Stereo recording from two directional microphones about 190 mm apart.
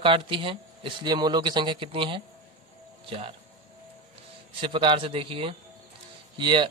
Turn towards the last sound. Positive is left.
turn(degrees=-25)  # may be behind; listen again after turning